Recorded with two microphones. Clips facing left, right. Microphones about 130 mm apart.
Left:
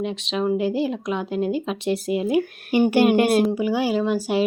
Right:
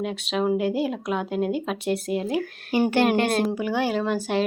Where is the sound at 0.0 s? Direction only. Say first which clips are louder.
Left 1 dB; 5° right (ahead or behind).